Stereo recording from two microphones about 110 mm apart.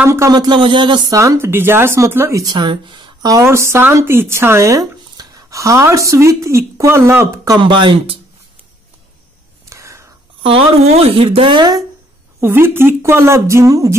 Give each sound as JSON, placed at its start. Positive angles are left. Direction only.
{"t": 0.0, "sound": "speech", "side_deg": -25}
{"t": 0.3, "sound": "speech", "side_deg": -40}
{"t": 1.1, "sound": "speech", "side_deg": -30}
{"t": 2.5, "sound": "speech", "side_deg": -45}
{"t": 3.4, "sound": "speech", "side_deg": -25}
{"t": 7.6, "sound": "speech", "side_deg": -50}
{"t": 9.7, "sound": "whispering", "side_deg": -25}
{"t": 10.4, "sound": "speech", "side_deg": -65}
{"t": 12.4, "sound": "speech", "side_deg": -20}